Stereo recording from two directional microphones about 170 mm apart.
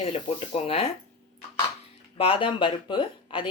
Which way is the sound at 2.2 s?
30° left (ahead or behind).